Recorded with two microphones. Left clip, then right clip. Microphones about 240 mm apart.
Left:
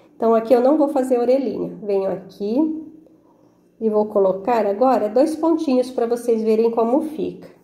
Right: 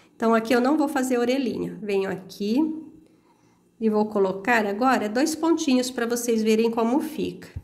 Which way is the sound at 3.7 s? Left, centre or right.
Right.